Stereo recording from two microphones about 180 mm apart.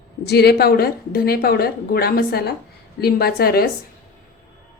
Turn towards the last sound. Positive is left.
turn(degrees=55)  # may be behind; listen again after turning